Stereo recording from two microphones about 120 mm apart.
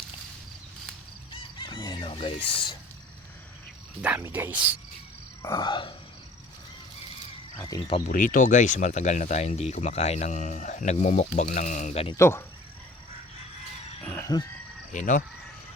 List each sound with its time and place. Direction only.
1.5 s chicken: 40° left (ahead or behind)
2.0 s speech: 50° left (ahead or behind)
4.3 s speech: 15° right (ahead or behind)
5.4 s a sound: 35° left (ahead or behind)
7.5 s speech: 35° left (ahead or behind)
8.0 s speech: 90° left
11.3 s speech: 90° left
12.1 s speech: 20° left (ahead or behind)
14.0 s fowl: 15° left (ahead or behind)
14.9 s speech: 90° left